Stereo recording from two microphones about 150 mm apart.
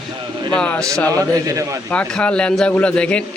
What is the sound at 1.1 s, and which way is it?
Speech, 20° right (ahead or behind).